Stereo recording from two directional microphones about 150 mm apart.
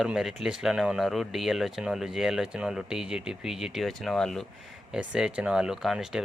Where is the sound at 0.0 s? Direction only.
5° right (ahead or behind).